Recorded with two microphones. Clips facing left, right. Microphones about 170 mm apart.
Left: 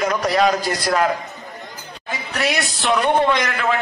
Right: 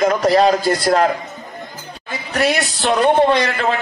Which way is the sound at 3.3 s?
30° right (ahead or behind).